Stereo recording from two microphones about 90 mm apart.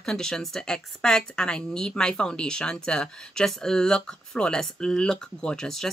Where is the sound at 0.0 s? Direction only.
5° left (ahead or behind).